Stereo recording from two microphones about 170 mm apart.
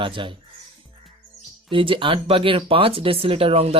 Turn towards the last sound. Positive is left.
turn(degrees=-35)  # may be behind; listen again after turning